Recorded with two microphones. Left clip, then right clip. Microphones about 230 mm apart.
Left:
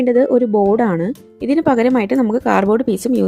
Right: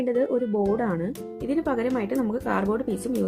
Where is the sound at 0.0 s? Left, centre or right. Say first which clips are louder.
Left 10 dB; left.